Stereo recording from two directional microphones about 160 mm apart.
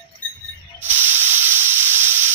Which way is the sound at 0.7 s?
10° right (ahead or behind).